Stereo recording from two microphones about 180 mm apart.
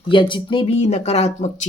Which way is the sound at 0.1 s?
25° left (ahead or behind).